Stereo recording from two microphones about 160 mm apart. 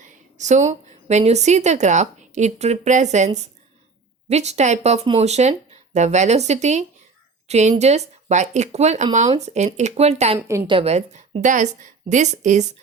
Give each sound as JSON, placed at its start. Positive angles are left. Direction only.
{"t": 0.0, "sound": "a woman's voice", "side_deg": -50}